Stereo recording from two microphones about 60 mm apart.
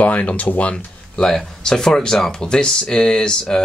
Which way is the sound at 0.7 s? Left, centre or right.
Centre.